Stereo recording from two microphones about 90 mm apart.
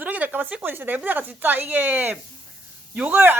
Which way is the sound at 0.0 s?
20° right (ahead or behind).